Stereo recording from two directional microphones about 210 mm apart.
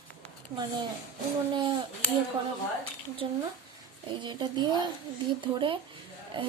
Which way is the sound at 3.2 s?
25° right (ahead or behind).